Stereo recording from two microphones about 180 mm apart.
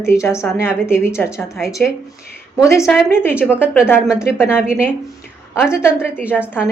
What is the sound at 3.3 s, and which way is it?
Speech, 5° right (ahead or behind).